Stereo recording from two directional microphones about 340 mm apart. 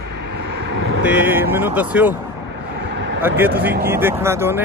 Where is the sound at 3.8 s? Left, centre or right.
Centre.